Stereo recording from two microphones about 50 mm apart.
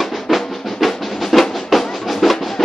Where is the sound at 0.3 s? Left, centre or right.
Centre.